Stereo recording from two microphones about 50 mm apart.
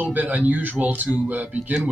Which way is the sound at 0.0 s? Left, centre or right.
Right.